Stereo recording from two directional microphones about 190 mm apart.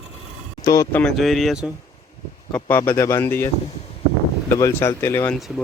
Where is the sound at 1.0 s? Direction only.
Centre (ahead or behind).